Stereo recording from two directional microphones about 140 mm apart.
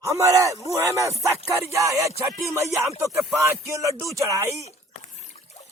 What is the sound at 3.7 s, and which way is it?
Speech, 20° right (ahead or behind).